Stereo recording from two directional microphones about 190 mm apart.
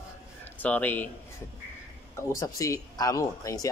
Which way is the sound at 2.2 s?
15° left (ahead or behind).